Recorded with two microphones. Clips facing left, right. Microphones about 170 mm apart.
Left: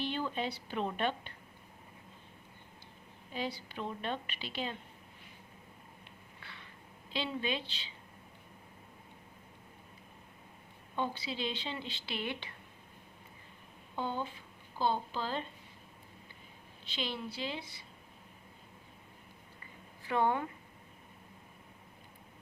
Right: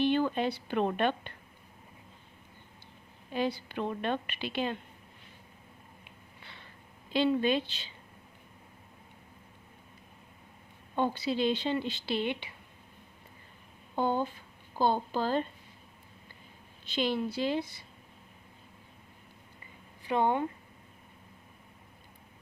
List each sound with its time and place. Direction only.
0.0 s a woman's voice: 60° right (ahead or behind)
3.3 s a woman's voice: 55° right (ahead or behind)
7.1 s speech: 50° right (ahead or behind)
10.9 s speech: 50° right (ahead or behind)
12.0 s speech: 30° right (ahead or behind)
13.9 s speech: 45° right (ahead or behind)
16.8 s speech: 45° right (ahead or behind)
20.1 s speech: 20° right (ahead or behind)